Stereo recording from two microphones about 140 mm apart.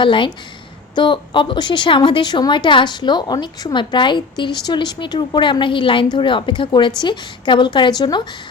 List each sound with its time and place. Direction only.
0.0 s a woman's voice: 35° left (ahead or behind)